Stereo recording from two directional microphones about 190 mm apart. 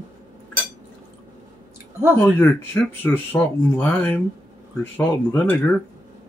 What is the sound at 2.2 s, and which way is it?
Speech, 10° left (ahead or behind).